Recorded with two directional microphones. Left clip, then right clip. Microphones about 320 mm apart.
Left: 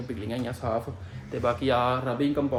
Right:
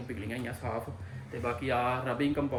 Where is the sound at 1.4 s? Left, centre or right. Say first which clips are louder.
Left 6 dB; centre.